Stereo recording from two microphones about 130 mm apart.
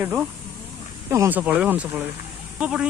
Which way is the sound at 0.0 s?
15° right (ahead or behind).